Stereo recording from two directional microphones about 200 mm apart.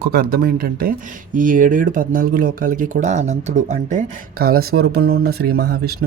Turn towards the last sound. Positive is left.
turn(degrees=-50)  # may be behind; listen again after turning